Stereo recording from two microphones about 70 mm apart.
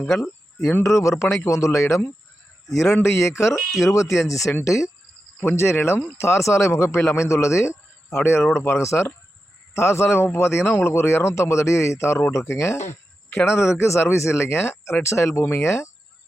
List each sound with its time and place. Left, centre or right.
0.8 s speech: left
2.6 s speech: centre
3.1 s speech: left
3.6 s speech: centre
3.9 s speech: left